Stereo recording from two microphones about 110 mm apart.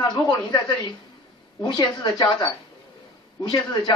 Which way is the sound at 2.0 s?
40° left (ahead or behind).